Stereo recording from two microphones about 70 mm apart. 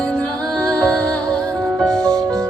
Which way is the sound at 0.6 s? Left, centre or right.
Centre.